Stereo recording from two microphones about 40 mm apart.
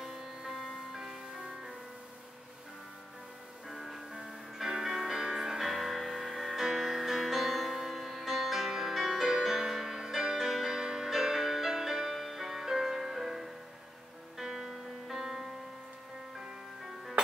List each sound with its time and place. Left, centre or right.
0.0 s music: centre
3.6 s music: centre